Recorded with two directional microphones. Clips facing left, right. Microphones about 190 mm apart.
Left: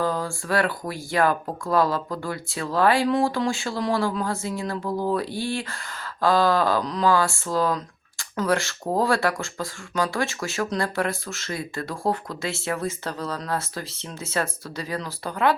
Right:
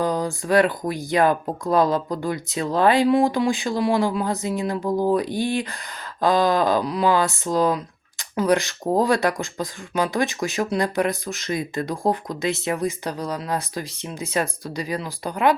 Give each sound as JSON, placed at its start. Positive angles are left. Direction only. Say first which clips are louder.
{"t": 0.0, "sound": "speech", "louder": "right 3 dB", "side_deg": -20}